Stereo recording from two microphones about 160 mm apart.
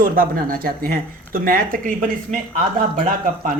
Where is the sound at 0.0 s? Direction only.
65° right (ahead or behind).